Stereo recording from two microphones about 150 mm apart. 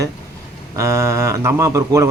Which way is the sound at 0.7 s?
20° right (ahead or behind).